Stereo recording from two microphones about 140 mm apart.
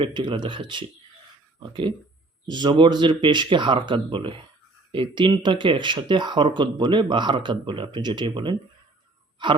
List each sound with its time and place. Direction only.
0.0 s speech: 35° right (ahead or behind)